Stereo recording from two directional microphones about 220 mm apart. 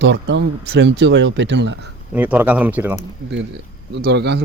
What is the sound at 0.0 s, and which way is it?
Speech, 55° right (ahead or behind).